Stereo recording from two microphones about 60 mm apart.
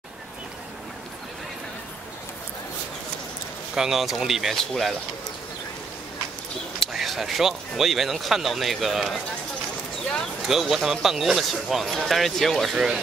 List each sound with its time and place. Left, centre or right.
3.7 s speech: centre
6.9 s speech: centre
10.4 s speech: centre
12.7 s speech: centre